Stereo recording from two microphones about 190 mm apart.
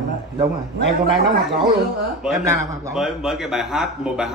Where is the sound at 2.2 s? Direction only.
5° right (ahead or behind).